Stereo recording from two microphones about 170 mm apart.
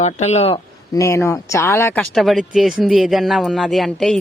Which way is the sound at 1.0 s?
15° left (ahead or behind).